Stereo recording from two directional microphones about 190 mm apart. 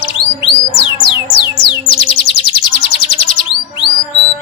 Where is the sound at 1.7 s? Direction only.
25° left (ahead or behind).